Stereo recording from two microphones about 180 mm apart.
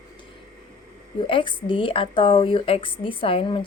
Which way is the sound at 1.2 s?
25° left (ahead or behind).